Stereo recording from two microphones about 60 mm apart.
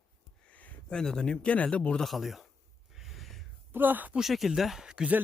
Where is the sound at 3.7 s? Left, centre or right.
Right.